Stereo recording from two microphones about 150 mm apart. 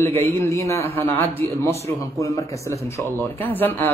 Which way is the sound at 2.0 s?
20° left (ahead or behind).